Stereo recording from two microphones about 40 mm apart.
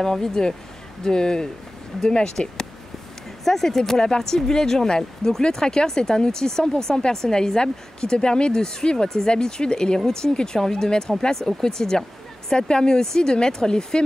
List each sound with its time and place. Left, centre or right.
0.0 s speech: centre
3.4 s speech: centre